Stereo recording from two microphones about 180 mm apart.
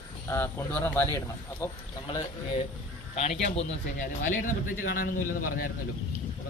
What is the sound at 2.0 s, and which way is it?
Speech, 25° left (ahead or behind).